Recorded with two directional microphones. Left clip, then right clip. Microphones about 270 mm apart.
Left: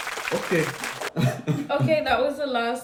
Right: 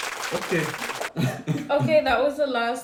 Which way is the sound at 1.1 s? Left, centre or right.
Centre.